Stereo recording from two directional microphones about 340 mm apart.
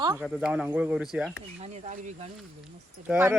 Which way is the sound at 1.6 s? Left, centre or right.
Centre.